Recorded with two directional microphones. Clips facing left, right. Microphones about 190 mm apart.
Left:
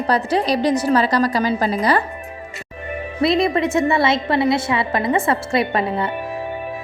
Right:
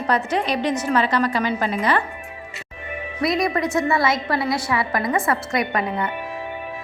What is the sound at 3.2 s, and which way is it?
A woman's voice, 25° left (ahead or behind).